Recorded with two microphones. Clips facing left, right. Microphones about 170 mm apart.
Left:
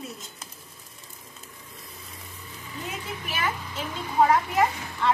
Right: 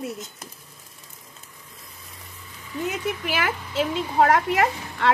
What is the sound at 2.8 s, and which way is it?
A woman's voice, 75° right (ahead or behind).